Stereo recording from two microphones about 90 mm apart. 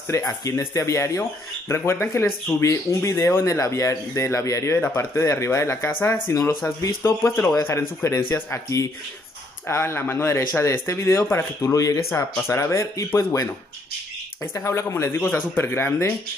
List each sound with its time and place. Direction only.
0.1 s speech: 35° left (ahead or behind)